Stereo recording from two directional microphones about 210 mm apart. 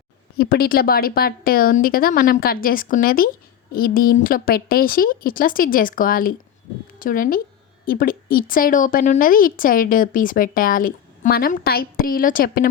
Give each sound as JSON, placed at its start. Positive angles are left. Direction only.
{"t": 0.3, "sound": "a woman's voice", "side_deg": 45}